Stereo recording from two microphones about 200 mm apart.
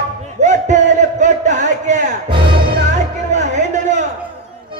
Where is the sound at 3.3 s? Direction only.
35° right (ahead or behind).